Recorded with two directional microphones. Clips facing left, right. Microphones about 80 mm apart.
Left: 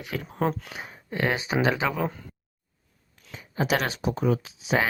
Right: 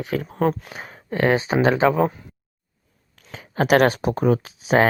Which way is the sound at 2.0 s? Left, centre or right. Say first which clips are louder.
Right 7 dB; centre.